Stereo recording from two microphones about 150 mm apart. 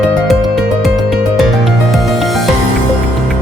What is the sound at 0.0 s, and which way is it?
Music, centre (ahead or behind).